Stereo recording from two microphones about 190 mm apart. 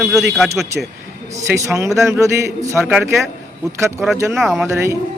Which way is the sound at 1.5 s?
15° right (ahead or behind).